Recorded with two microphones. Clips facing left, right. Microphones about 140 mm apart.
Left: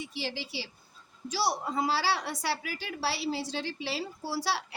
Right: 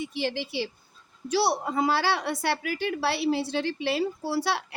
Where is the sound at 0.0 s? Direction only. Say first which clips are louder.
Right 7 dB; 55° right (ahead or behind).